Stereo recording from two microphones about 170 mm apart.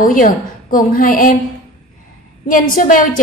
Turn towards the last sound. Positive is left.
turn(degrees=55)  # may be behind; listen again after turning